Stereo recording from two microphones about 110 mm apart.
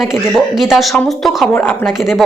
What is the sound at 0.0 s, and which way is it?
A woman's voice, centre (ahead or behind).